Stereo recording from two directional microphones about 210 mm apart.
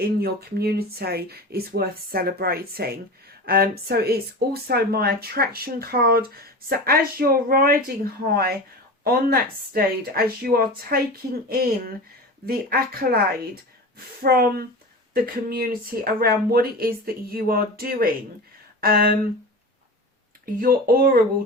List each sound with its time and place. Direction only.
0.0 s speech: 45° right (ahead or behind)
14.2 s speech: 45° right (ahead or behind)
20.4 s speech: 45° right (ahead or behind)